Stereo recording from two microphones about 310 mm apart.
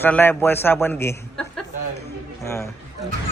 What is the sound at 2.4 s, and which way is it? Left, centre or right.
Speech, centre.